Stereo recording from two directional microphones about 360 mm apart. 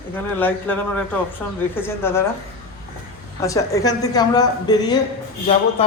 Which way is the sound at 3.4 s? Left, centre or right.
Centre.